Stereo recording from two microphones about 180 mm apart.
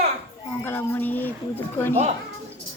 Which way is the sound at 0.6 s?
10° left (ahead or behind).